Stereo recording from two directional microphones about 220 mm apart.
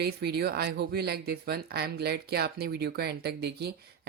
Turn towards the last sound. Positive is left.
turn(degrees=-50)  # may be behind; listen again after turning